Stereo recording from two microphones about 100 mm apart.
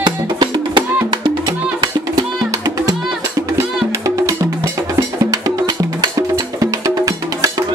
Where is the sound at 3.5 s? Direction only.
30° right (ahead or behind).